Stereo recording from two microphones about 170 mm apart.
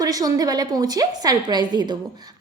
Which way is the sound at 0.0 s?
20° right (ahead or behind).